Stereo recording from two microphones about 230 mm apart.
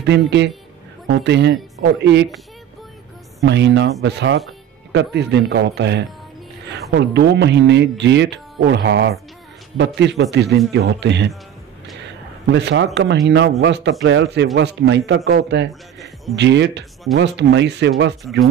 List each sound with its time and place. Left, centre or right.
0.0 s speech: right
3.4 s speech: right
12.4 s speech: right